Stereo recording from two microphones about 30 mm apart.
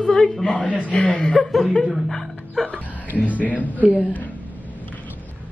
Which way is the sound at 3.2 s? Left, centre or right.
Left.